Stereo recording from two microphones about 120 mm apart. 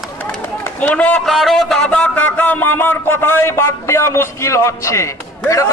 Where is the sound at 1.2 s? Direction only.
Centre (ahead or behind).